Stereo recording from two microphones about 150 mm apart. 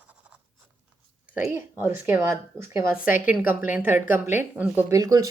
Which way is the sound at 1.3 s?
15° right (ahead or behind).